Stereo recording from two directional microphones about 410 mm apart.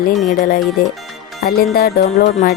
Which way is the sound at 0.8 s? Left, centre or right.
Left.